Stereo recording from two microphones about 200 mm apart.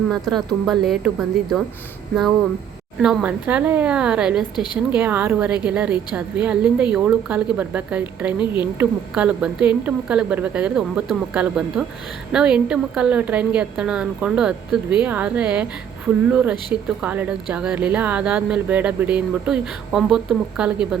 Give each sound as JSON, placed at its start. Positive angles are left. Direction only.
{"t": 0.1, "sound": "speech", "side_deg": 0}
{"t": 3.0, "sound": "speech", "side_deg": -5}
{"t": 4.5, "sound": "a woman's voice", "side_deg": 20}
{"t": 4.9, "sound": "speech", "side_deg": -10}